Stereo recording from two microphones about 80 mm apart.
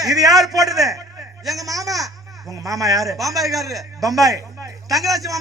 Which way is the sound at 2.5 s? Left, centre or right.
Right.